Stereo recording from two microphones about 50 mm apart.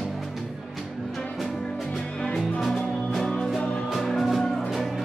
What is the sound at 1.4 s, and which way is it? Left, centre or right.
Music, centre.